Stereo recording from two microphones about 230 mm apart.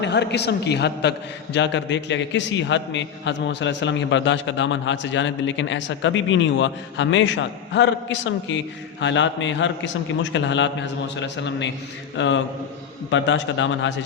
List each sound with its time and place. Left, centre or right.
0.0 s a man's voice: left